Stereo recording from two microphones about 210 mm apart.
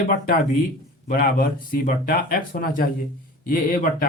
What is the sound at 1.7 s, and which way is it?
Speech, 45° left (ahead or behind).